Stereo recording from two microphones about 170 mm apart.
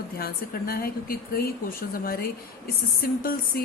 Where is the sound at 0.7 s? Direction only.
60° left (ahead or behind).